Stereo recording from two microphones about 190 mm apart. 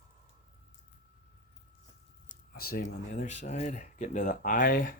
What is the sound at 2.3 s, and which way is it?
Squish, 50° left (ahead or behind).